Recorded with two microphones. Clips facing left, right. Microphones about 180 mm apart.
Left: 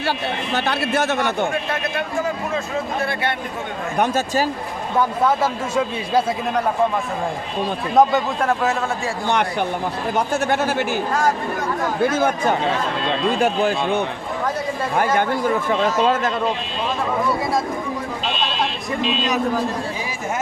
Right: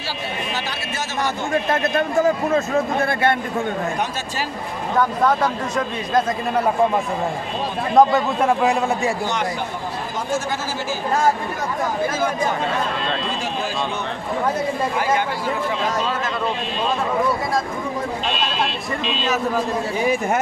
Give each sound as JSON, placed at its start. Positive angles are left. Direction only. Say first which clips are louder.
{"t": 0.5, "sound": "a man's voice", "louder": "left 7 dB", "side_deg": 60}
{"t": 1.7, "sound": "a man's voice", "louder": "right 5 dB", "side_deg": -45}
{"t": 3.9, "sound": "speech", "louder": "left 6 dB", "side_deg": 55}
{"t": 4.9, "sound": "speech", "louder": "even", "side_deg": 10}
{"t": 7.9, "sound": "a man's voice", "louder": "right 1 dB", "side_deg": -5}
{"t": 10.2, "sound": "a man's voice", "louder": "left 4 dB", "side_deg": 60}
{"t": 13.4, "sound": "a man's voice", "louder": "left 6 dB", "side_deg": 55}